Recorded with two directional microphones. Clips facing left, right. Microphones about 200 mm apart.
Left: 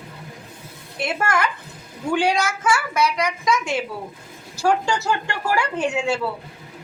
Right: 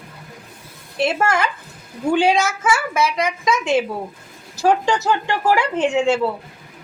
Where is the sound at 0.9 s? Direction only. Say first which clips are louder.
Right 4 dB; 25° right (ahead or behind).